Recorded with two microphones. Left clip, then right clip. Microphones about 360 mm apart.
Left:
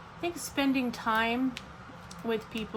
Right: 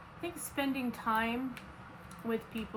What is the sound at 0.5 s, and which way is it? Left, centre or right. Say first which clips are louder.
Speech: left 5 dB; left.